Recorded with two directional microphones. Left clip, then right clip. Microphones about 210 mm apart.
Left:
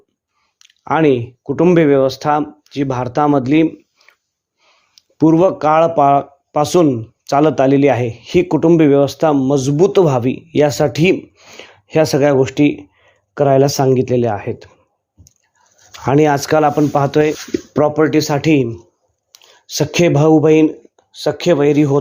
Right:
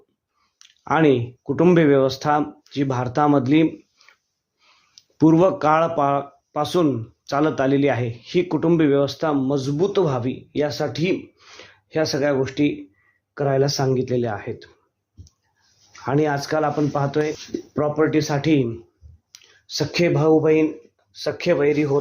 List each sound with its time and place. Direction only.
0.6 s speech: 30° left (ahead or behind)
15.9 s speech: 40° left (ahead or behind)
19.3 s a sound: 20° left (ahead or behind)
19.7 s speech: 35° left (ahead or behind)